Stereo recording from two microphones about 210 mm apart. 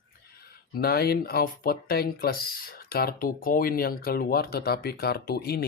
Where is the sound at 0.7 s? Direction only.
45° left (ahead or behind).